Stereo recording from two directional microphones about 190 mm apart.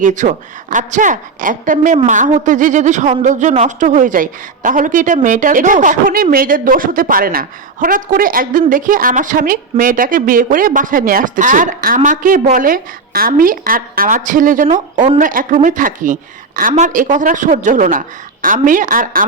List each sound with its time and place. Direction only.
0.0 s a woman's voice: 40° right (ahead or behind)